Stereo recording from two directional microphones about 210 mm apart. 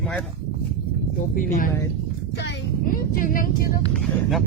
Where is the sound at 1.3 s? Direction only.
40° left (ahead or behind).